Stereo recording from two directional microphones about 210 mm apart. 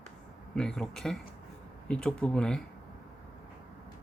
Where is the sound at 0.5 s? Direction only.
5° left (ahead or behind).